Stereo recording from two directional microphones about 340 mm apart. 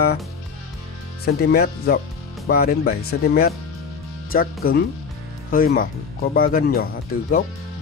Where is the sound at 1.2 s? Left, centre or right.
Left.